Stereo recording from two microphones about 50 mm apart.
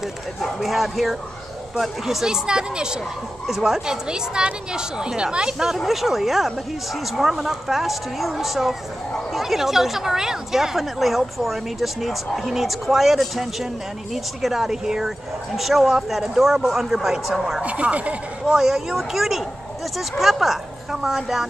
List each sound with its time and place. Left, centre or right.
0.4 s a woman's voice: centre
3.4 s a woman's voice: centre
17.6 s a woman's voice: right
18.5 s a woman's voice: centre